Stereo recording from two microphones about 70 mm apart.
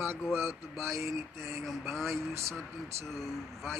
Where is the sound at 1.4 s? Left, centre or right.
Centre.